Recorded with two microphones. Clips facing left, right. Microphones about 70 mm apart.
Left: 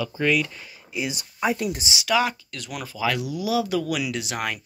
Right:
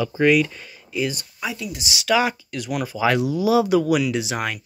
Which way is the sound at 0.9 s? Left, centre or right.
Centre.